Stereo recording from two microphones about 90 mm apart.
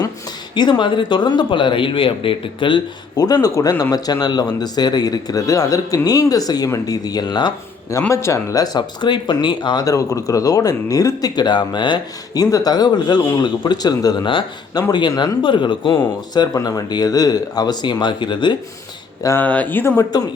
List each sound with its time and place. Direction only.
0.5 s speech: 55° left (ahead or behind)
3.2 s speech: 45° left (ahead or behind)
8.1 s speech: 35° left (ahead or behind); by 9.8 s 60° left (ahead or behind)
9.8 s speech: 40° left (ahead or behind); by 16.0 s 60° left (ahead or behind)
16.3 s speech: 50° left (ahead or behind)
19.4 s speech: 15° left (ahead or behind)
20.1 s speech: 45° left (ahead or behind)